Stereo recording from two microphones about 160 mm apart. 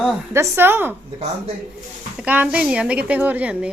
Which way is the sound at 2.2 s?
10° right (ahead or behind).